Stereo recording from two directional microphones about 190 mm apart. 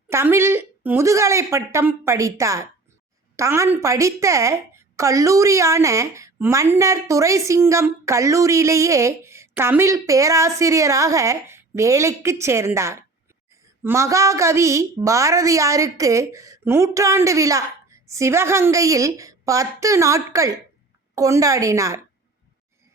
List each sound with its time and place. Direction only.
0.1 s a woman's voice: 15° right (ahead or behind)